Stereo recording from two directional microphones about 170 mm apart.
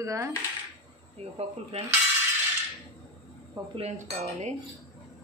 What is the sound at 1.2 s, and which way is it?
Speech, 35° right (ahead or behind).